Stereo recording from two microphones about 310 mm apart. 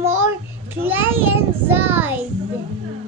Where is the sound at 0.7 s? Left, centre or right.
Centre.